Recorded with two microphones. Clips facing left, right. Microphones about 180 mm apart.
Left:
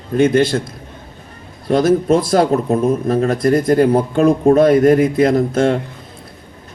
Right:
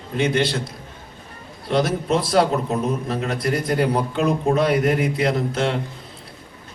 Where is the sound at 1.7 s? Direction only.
45° left (ahead or behind).